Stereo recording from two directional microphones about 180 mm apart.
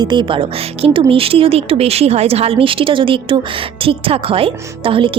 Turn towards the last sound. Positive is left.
turn(degrees=-30)  # may be behind; listen again after turning